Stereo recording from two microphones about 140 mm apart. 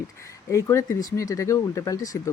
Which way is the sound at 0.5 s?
20° left (ahead or behind).